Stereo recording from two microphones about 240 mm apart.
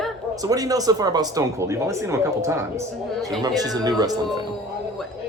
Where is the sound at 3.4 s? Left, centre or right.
Centre.